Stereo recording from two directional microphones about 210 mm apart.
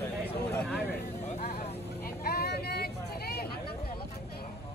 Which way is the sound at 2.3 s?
50° left (ahead or behind).